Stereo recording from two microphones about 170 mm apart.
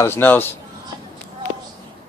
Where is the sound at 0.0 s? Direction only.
15° left (ahead or behind).